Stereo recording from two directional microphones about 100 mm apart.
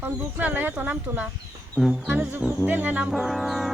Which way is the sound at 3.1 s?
Centre (ahead or behind).